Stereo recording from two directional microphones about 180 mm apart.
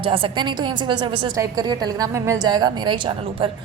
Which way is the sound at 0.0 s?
30° right (ahead or behind).